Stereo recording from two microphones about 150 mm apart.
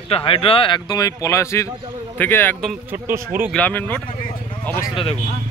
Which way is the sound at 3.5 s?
10° left (ahead or behind).